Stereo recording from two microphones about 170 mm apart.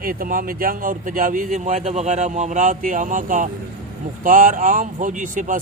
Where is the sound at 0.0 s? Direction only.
55° right (ahead or behind).